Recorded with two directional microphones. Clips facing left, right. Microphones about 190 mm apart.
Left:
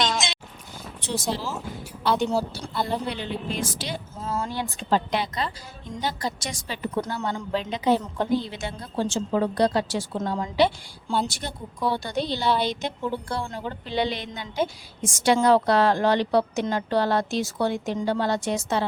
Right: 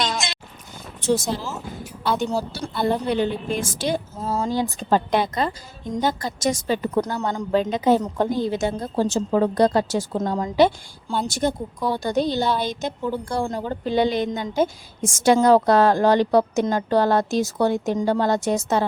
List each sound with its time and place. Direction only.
0.0 s a sound: centre (ahead or behind)
1.2 s a woman's voice: centre (ahead or behind)
3.1 s a woman's voice: 45° right (ahead or behind)